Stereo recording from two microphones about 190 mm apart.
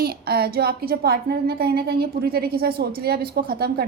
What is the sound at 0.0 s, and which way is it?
A woman's voice, 55° right (ahead or behind).